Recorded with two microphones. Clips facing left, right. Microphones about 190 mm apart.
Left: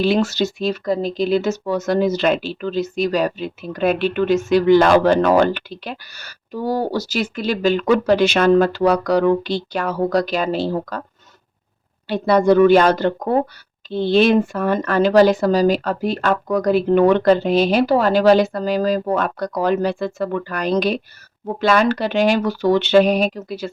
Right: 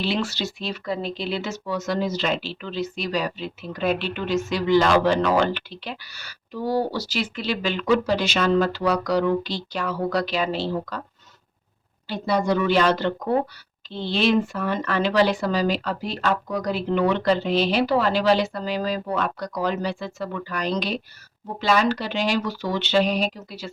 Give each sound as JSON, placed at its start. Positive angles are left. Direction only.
{"t": 0.0, "sound": "speech", "side_deg": 45}
{"t": 12.0, "sound": "speech", "side_deg": 60}